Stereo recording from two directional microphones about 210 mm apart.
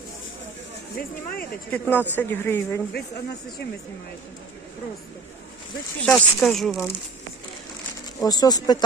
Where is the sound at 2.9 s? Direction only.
50° left (ahead or behind).